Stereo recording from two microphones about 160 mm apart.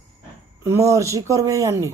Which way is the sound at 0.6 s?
20° right (ahead or behind).